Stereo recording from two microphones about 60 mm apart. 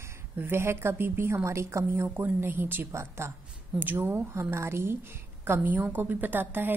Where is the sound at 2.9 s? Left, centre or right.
Right.